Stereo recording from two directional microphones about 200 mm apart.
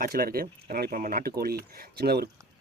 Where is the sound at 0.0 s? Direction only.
45° right (ahead or behind).